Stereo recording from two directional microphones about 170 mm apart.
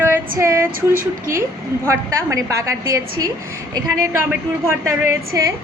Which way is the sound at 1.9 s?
20° right (ahead or behind).